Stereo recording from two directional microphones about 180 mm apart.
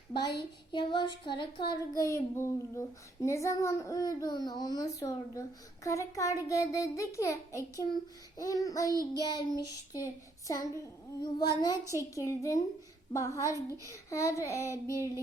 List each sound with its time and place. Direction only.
0.1 s a child's voice: 25° left (ahead or behind)